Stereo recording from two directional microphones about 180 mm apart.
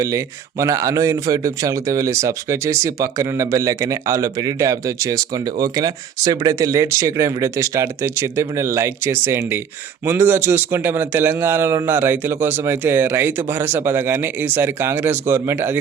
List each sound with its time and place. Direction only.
0.6 s a man's voice: 15° right (ahead or behind)